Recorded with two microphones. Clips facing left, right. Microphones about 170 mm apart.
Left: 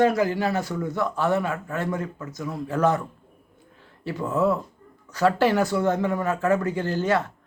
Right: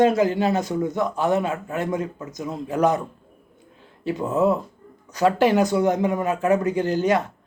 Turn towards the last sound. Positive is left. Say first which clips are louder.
# right 3 dB
turn(degrees=-15)  # may be behind; listen again after turning